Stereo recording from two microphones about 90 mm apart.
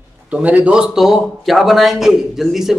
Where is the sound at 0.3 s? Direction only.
15° right (ahead or behind).